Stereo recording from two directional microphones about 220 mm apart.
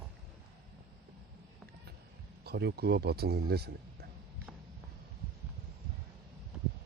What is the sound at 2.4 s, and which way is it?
Speech, 45° right (ahead or behind).